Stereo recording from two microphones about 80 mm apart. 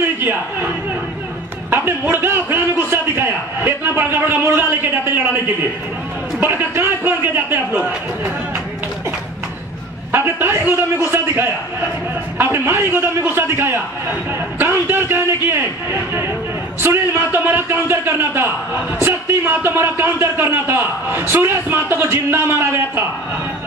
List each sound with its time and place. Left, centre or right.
0.2 s a man's voice: right
1.7 s a man's voice: right
10.1 s a man's voice: right